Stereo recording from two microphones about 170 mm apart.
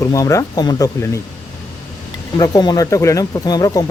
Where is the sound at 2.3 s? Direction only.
25° left (ahead or behind).